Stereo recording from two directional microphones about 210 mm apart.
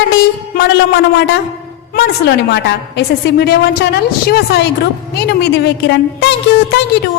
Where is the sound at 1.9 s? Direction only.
55° left (ahead or behind).